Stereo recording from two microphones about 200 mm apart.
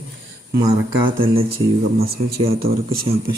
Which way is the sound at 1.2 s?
25° right (ahead or behind).